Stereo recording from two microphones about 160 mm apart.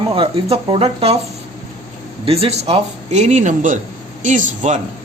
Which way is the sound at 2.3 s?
40° right (ahead or behind).